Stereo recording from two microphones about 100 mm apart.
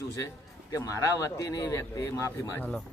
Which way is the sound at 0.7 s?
30° left (ahead or behind).